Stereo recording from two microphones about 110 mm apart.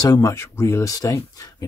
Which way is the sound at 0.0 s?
30° left (ahead or behind).